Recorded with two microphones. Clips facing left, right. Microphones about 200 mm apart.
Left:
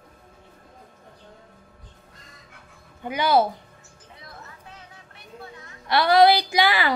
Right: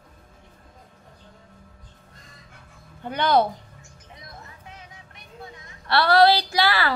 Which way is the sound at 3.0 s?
10° left (ahead or behind).